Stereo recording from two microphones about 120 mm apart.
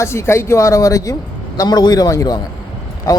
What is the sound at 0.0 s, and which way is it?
A man's voice, 20° left (ahead or behind).